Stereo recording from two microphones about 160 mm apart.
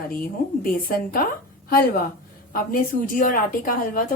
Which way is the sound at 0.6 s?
65° left (ahead or behind).